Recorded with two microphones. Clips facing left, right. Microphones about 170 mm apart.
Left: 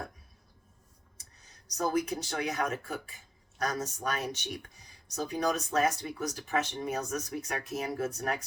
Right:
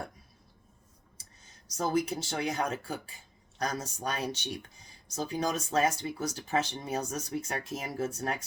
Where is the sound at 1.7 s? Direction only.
30° right (ahead or behind).